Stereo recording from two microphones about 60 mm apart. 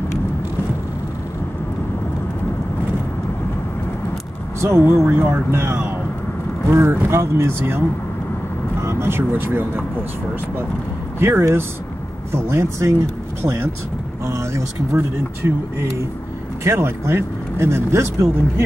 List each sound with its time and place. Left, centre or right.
4.6 s speech: right
8.8 s speech: right
11.1 s speech: right
12.4 s speech: right
14.2 s speech: right